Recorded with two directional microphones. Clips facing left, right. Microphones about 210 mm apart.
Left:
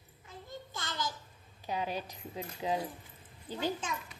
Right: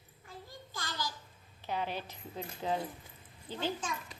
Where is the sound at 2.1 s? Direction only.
10° left (ahead or behind).